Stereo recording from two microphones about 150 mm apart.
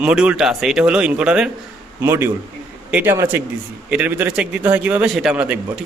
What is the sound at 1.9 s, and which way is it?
A man's voice, 15° right (ahead or behind).